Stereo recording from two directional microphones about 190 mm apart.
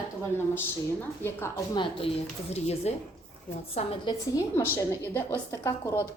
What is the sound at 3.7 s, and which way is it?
A woman's voice, 20° left (ahead or behind).